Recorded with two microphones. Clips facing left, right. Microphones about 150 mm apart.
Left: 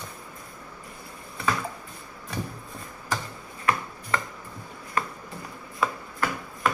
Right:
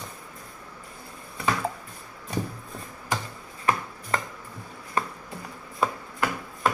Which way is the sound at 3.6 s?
30° right (ahead or behind).